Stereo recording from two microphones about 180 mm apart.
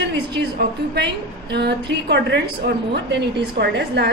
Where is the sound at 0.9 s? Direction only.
70° right (ahead or behind).